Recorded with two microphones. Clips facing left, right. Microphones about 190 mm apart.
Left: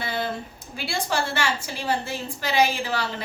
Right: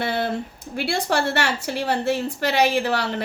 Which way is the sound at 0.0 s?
65° right (ahead or behind).